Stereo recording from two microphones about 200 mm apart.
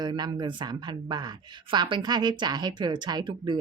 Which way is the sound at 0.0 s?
20° right (ahead or behind).